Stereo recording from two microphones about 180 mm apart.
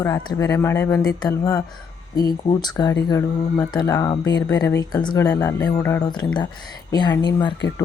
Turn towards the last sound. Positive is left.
turn(degrees=20)  # may be behind; listen again after turning